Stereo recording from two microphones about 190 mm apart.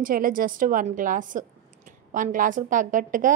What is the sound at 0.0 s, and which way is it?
A woman's voice, 45° right (ahead or behind).